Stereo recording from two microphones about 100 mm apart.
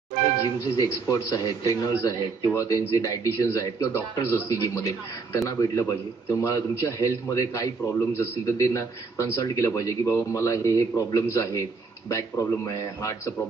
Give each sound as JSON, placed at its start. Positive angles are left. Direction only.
{"t": 0.7, "sound": "a man's voice", "side_deg": 35}